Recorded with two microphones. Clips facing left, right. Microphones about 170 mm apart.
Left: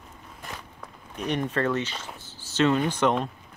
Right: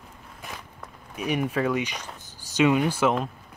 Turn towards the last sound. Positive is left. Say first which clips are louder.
# right 1 dB
turn(degrees=-5)  # may be behind; listen again after turning